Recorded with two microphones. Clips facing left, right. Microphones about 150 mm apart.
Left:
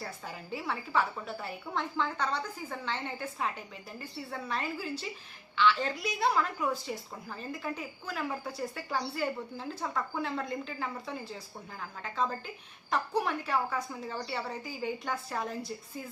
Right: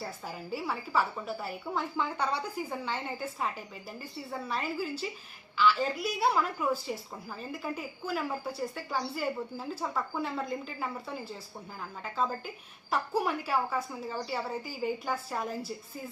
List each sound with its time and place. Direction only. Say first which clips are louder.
0.0 s a woman's voice: right 2 dB; 5° right (ahead or behind)